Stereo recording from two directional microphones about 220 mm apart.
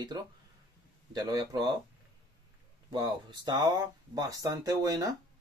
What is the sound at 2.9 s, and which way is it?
Speech, 20° right (ahead or behind).